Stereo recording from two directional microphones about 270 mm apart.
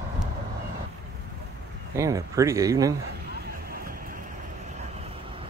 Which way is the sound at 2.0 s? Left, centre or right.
Centre.